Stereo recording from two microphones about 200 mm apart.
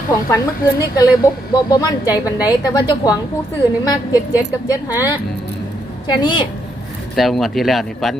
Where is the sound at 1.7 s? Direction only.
20° left (ahead or behind).